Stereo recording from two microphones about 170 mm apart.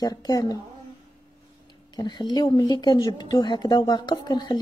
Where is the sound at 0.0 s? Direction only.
20° left (ahead or behind).